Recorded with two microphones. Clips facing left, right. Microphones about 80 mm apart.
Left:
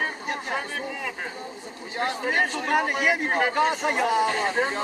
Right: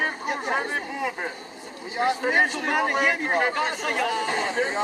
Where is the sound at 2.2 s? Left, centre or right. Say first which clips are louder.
Right 1 dB; right.